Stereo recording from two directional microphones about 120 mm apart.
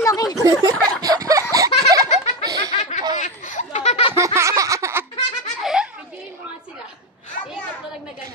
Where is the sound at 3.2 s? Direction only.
90° left; by 4.0 s 75° left (ahead or behind).